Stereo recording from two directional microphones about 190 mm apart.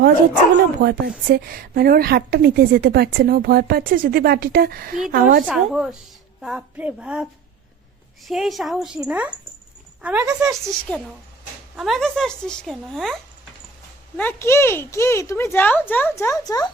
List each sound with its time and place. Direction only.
0.8 s a woman's voice: 55° right (ahead or behind)
5.5 s a woman's voice: 5° right (ahead or behind)
10.4 s speech: 5° left (ahead or behind)
14.2 s speech: 10° left (ahead or behind)